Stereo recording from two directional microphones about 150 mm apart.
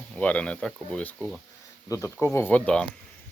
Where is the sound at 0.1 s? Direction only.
10° left (ahead or behind).